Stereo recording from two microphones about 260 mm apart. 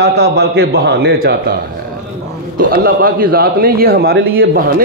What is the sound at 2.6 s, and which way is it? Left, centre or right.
Speech, right.